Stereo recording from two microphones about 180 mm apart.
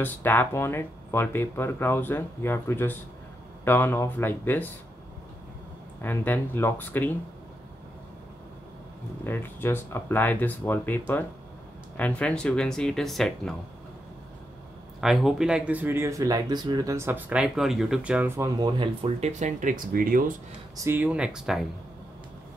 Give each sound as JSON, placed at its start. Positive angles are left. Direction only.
{"t": 0.0, "sound": "speech", "side_deg": 10}
{"t": 6.0, "sound": "speech", "side_deg": 10}
{"t": 9.2, "sound": "speech", "side_deg": 10}
{"t": 15.0, "sound": "speech", "side_deg": 0}
{"t": 20.7, "sound": "speech", "side_deg": -15}